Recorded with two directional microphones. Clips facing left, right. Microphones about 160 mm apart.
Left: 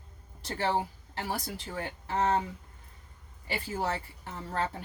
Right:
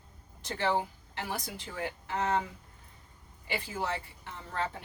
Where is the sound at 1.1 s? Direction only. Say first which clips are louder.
Left 3 dB; 35° left (ahead or behind).